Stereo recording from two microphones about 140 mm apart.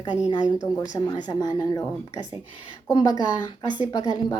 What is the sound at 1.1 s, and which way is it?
Speech, 30° left (ahead or behind).